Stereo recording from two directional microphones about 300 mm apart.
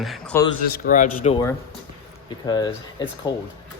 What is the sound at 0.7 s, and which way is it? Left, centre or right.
Speech, left.